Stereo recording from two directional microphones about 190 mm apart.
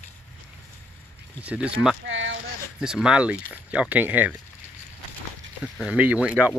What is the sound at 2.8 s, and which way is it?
Speech, 5° right (ahead or behind).